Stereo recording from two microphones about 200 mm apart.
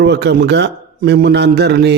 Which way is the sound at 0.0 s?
55° right (ahead or behind).